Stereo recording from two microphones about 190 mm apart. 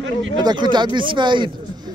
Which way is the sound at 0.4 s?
25° right (ahead or behind).